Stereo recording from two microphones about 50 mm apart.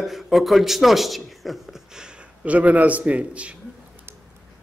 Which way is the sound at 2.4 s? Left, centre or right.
Right.